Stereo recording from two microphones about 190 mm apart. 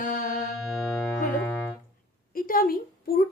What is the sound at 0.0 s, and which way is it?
Music, 45° left (ahead or behind).